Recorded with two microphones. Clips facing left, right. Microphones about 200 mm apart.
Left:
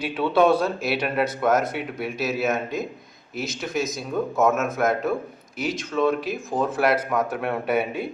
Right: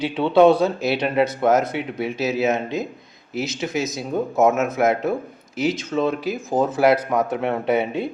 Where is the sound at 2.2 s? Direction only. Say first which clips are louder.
Right 3 dB; 20° right (ahead or behind).